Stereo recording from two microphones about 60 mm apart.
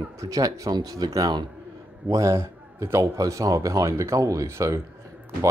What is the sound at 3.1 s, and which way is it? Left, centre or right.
Speech, right.